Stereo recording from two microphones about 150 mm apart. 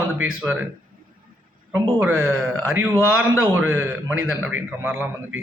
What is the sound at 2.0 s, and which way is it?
A man's voice, 10° right (ahead or behind).